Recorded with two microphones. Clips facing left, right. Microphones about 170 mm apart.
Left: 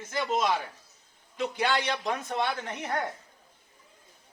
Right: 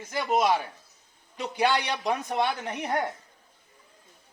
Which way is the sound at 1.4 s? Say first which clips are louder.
Right 2 dB; 15° right (ahead or behind).